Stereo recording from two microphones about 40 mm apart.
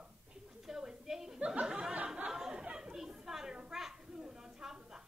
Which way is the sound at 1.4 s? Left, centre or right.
Right.